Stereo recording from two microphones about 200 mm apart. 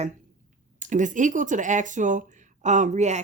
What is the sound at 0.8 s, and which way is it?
Speech, 40° right (ahead or behind).